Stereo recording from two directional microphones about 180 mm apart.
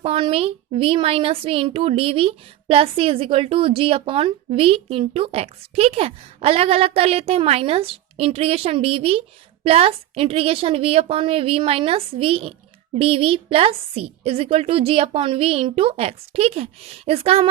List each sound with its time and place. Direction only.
0.0 s speech: 30° right (ahead or behind)